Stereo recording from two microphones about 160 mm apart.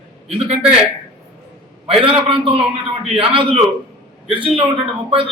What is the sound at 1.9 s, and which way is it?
A man's voice, 35° right (ahead or behind).